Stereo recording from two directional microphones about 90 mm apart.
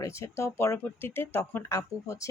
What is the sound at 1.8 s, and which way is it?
Speech, 40° left (ahead or behind).